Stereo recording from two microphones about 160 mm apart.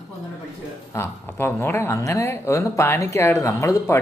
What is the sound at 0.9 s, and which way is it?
Speech, 15° left (ahead or behind).